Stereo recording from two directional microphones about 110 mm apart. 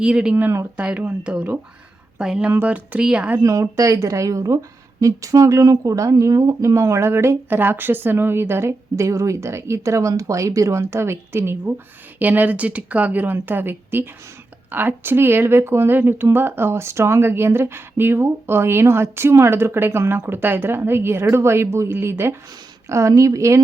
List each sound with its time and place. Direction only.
0.0 s speech: 10° right (ahead or behind)
3.4 s speech: 30° right (ahead or behind)